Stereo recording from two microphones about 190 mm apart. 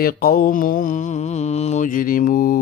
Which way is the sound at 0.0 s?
55° left (ahead or behind).